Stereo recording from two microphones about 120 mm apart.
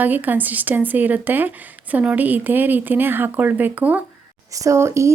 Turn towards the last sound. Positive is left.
turn(degrees=-25)  # may be behind; listen again after turning